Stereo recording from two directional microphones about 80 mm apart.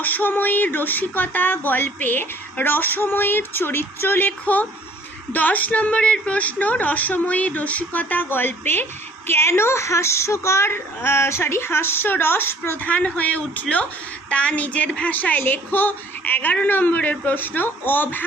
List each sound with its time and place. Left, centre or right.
0.0 s a woman's voice: left